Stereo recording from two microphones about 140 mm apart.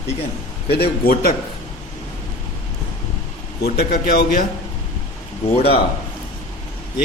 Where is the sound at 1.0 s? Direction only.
90° left.